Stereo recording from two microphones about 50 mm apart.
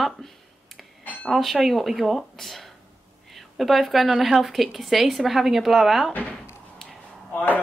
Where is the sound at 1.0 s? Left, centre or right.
Left.